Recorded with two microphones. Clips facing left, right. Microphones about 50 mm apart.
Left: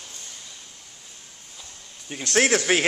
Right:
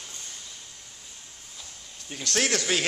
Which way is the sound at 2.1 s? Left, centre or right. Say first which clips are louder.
Left 5 dB; centre.